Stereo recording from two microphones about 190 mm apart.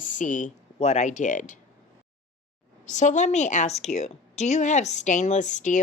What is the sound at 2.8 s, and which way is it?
A woman's voice, 40° left (ahead or behind).